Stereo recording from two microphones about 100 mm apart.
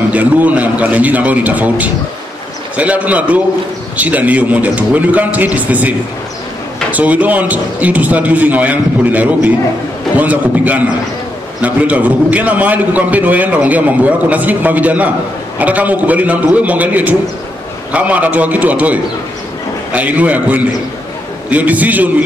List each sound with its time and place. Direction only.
0.1 s a man's voice: 15° right (ahead or behind)